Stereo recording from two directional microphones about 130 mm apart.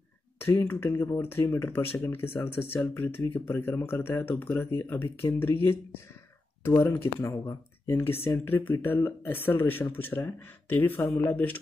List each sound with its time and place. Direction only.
0.5 s speech: 15° left (ahead or behind)